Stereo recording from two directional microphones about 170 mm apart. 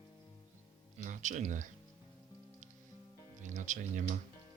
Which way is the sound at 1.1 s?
45° right (ahead or behind).